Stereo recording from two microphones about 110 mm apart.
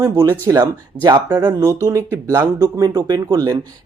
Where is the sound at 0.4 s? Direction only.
35° right (ahead or behind).